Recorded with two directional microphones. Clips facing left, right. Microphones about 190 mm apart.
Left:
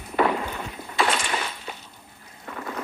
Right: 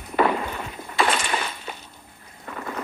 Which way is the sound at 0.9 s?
55° right (ahead or behind).